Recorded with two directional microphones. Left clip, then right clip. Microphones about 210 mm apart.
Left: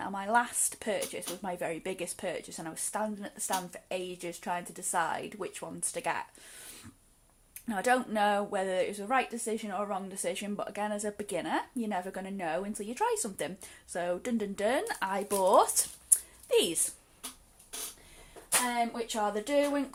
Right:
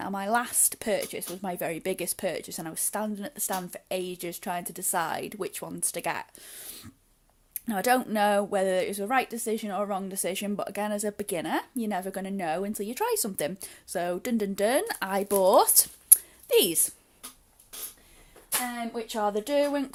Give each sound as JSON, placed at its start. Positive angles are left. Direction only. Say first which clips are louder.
{"t": 0.0, "sound": "a woman's voice", "louder": "right 1 dB", "side_deg": -55}
{"t": 7.7, "sound": "a woman's voice", "louder": "right 3 dB", "side_deg": -55}
{"t": 19.0, "sound": "a woman's voice", "louder": "right 4 dB", "side_deg": -40}